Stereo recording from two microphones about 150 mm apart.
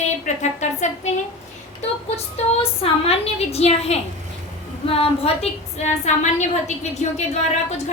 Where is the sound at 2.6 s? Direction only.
40° left (ahead or behind).